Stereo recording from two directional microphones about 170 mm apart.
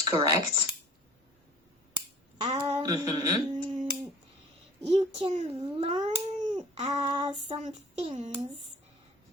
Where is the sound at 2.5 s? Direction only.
40° right (ahead or behind).